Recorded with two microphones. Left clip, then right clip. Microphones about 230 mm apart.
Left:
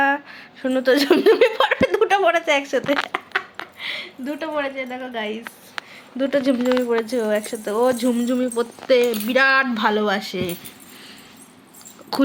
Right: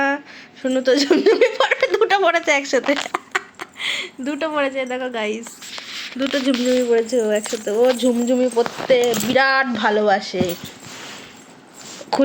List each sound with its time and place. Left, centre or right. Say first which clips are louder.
0.6 s speech: right 1 dB; left
1.9 s speech: right 1 dB; centre
3.1 s speech: right 1 dB; right
6.1 s speech: left 1 dB; centre; by 10.5 s left